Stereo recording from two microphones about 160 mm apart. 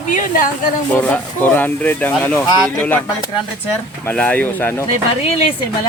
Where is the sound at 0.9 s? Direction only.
10° left (ahead or behind).